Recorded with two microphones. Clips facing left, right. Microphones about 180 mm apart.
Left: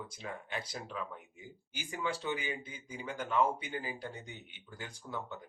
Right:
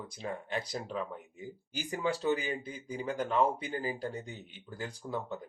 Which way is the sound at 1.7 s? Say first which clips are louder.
Right 5 dB; 35° right (ahead or behind).